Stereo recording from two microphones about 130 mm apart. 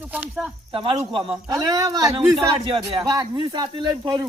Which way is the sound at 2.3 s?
45° right (ahead or behind).